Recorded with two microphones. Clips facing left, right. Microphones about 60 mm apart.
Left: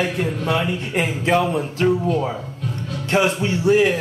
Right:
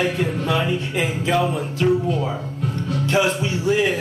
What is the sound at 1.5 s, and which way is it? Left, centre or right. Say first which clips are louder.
Music: left 1 dB; left.